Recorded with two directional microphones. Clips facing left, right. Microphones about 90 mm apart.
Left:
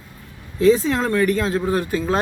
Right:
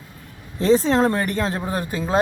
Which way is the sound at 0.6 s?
30° right (ahead or behind).